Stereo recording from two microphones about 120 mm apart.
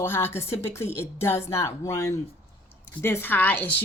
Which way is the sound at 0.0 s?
20° left (ahead or behind).